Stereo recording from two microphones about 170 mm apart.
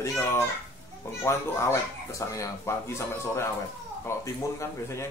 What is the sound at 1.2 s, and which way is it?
Speech, 15° left (ahead or behind).